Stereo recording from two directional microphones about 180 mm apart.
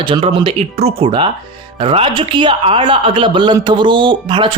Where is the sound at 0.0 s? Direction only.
25° right (ahead or behind).